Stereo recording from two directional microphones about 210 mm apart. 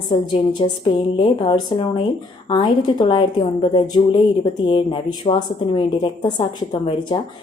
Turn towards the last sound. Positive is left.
turn(degrees=25)  # may be behind; listen again after turning